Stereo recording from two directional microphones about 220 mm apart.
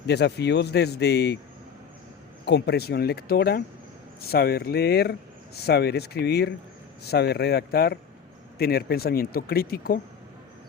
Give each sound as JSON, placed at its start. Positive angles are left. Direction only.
{"t": 0.1, "sound": "speech", "side_deg": 50}
{"t": 2.4, "sound": "speech", "side_deg": 50}